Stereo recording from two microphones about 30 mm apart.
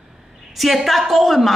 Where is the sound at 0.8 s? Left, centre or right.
Centre.